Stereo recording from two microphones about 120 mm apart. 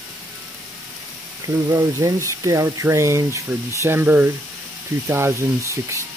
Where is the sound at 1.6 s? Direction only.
25° right (ahead or behind).